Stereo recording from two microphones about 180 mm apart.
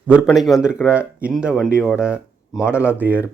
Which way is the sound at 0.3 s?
Centre (ahead or behind).